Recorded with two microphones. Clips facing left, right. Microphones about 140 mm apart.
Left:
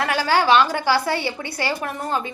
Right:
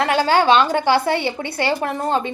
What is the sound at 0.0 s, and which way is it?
A woman's voice, 25° right (ahead or behind).